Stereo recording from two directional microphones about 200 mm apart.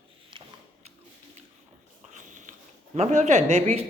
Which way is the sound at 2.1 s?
40° right (ahead or behind).